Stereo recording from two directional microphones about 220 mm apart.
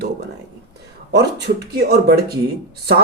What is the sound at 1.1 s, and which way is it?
Speech, 50° right (ahead or behind).